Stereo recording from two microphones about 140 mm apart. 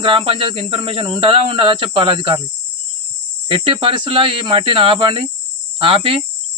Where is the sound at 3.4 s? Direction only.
35° right (ahead or behind).